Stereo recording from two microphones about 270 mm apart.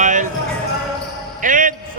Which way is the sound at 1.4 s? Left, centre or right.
Right.